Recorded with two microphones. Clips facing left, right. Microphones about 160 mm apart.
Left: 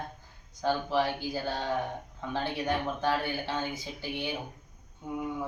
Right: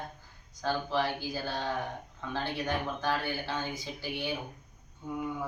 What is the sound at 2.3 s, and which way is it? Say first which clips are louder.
Speech: left 2 dB; 15° left (ahead or behind).